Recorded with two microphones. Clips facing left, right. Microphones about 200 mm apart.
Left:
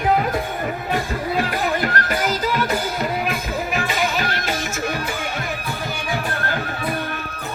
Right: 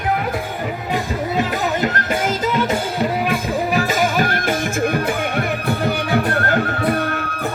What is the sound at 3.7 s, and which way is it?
Music, 45° right (ahead or behind).